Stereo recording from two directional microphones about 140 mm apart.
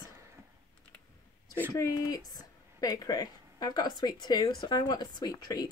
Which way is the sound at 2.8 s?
30° left (ahead or behind).